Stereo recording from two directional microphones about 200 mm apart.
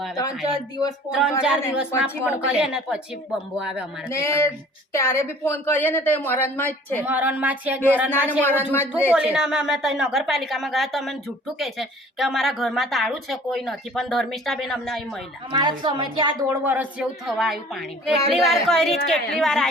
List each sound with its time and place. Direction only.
0.2 s speech: 20° left (ahead or behind)
1.4 s a woman's voice: 5° right (ahead or behind)
4.1 s a woman's voice: 15° left (ahead or behind)
7.0 s speech: 10° right (ahead or behind)
8.3 s a woman's voice: 10° left (ahead or behind)
9.1 s a woman's voice: 5° right (ahead or behind)
15.5 s a woman's voice: 20° right (ahead or behind)
16.6 s a woman's voice: 5° right (ahead or behind)